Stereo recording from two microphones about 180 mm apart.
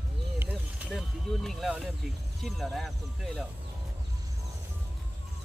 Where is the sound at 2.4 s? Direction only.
Centre (ahead or behind).